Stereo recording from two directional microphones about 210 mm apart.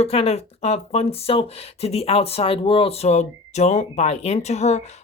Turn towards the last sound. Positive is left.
turn(degrees=30)  # may be behind; listen again after turning